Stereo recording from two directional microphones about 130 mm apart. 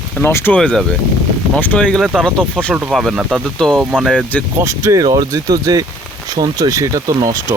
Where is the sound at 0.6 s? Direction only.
5° left (ahead or behind).